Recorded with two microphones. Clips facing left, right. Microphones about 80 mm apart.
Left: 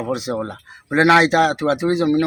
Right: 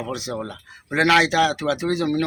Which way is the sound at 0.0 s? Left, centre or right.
Left.